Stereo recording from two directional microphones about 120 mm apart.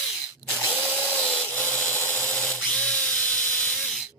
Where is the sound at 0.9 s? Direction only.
10° left (ahead or behind).